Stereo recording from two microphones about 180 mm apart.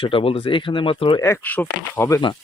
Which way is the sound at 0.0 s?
30° left (ahead or behind).